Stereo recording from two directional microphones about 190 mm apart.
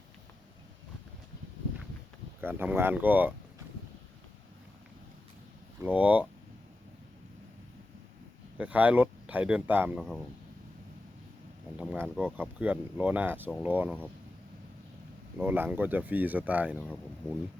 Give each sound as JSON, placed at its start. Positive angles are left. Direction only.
{"t": 2.4, "sound": "speech", "side_deg": -10}
{"t": 5.8, "sound": "speech", "side_deg": -10}
{"t": 8.5, "sound": "speech", "side_deg": -10}
{"t": 11.8, "sound": "speech", "side_deg": -5}
{"t": 15.4, "sound": "speech", "side_deg": -10}